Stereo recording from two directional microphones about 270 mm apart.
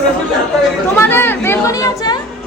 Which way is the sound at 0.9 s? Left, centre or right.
Centre.